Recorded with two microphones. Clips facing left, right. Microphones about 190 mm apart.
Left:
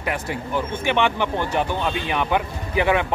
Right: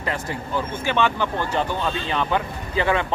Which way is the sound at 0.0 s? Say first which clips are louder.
Left 1 dB; 15° left (ahead or behind).